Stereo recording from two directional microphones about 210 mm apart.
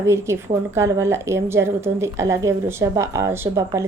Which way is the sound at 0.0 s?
15° right (ahead or behind).